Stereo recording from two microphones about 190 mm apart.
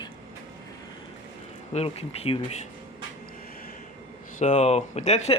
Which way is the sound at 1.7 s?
30° left (ahead or behind).